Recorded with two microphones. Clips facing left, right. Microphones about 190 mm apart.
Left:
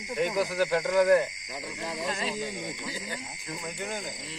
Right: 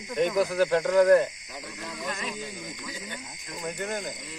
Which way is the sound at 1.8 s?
30° left (ahead or behind).